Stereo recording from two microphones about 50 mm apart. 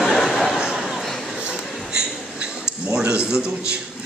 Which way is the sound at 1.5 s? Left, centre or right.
Centre.